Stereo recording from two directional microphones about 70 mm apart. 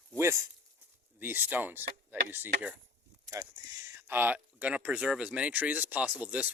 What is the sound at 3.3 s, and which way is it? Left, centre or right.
Speech, right.